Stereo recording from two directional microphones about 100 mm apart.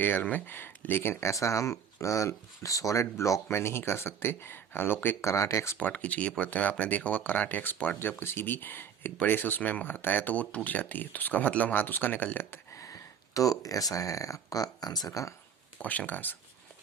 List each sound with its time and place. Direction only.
0.0 s speech: 15° left (ahead or behind)
5.7 s speech: 15° left (ahead or behind); by 15.3 s 35° left (ahead or behind)
15.8 s speech: 15° left (ahead or behind)